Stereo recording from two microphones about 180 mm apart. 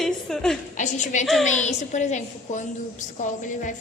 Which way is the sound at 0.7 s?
40° left (ahead or behind).